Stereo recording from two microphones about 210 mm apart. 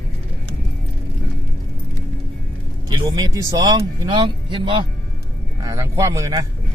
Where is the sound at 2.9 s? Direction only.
20° right (ahead or behind).